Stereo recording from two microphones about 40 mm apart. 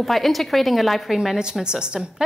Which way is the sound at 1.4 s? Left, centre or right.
Centre.